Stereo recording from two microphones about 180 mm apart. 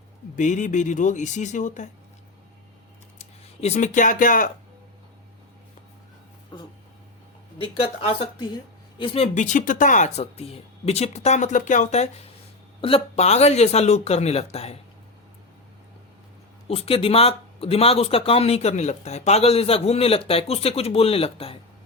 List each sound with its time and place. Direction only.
0.3 s speech: 45° left (ahead or behind)
3.2 s speech: 35° left (ahead or behind)
7.6 s speech: 30° left (ahead or behind)
16.6 s speech: 35° left (ahead or behind)